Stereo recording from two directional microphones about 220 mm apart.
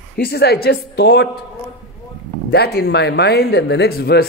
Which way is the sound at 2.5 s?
45° left (ahead or behind).